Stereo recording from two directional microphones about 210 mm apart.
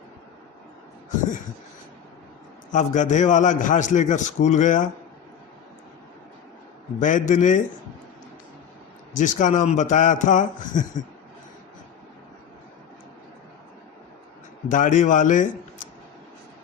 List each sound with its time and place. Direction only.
2.7 s a man's voice: 35° left (ahead or behind)
7.0 s a man's voice: 35° left (ahead or behind)
9.1 s a man's voice: 35° left (ahead or behind)
14.7 s a man's voice: 35° left (ahead or behind)